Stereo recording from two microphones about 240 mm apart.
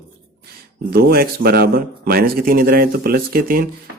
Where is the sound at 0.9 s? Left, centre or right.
Right.